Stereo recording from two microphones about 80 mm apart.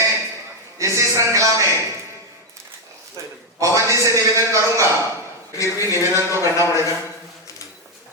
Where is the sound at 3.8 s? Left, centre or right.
Right.